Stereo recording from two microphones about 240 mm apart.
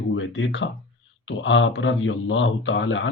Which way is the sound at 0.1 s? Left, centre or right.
Left.